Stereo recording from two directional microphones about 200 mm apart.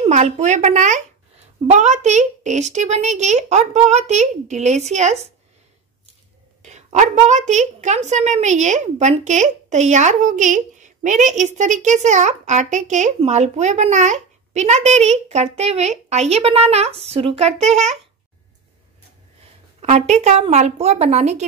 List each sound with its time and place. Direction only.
0.0 s a woman's voice: 35° right (ahead or behind)
6.6 s a woman's voice: 35° right (ahead or behind)
19.8 s a woman's voice: 35° right (ahead or behind)